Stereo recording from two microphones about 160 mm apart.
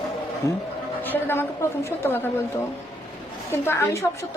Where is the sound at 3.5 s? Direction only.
15° left (ahead or behind).